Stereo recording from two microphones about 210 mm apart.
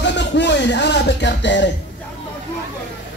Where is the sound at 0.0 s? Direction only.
55° left (ahead or behind).